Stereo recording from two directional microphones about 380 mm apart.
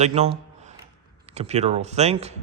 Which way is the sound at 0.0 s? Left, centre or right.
Centre.